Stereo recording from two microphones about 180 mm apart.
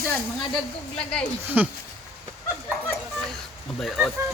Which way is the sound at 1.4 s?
10° right (ahead or behind).